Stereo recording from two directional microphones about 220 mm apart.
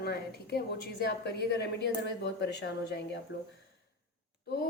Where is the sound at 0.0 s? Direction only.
45° left (ahead or behind).